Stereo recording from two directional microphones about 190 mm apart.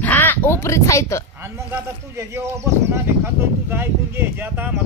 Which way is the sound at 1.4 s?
15° right (ahead or behind).